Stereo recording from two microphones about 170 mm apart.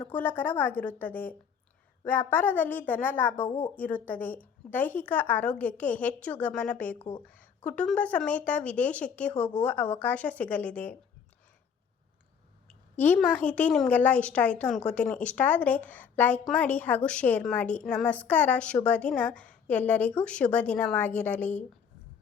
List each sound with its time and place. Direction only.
0.0 s a woman's voice: 10° left (ahead or behind)
12.6 s a sound: 10° left (ahead or behind)
13.3 s a woman's voice: 10° left (ahead or behind)